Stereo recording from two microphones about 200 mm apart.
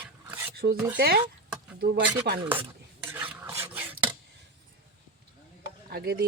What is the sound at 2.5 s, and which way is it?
Rub, 10° right (ahead or behind).